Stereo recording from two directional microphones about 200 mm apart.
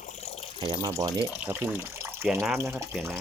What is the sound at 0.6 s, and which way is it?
Speech, 25° right (ahead or behind).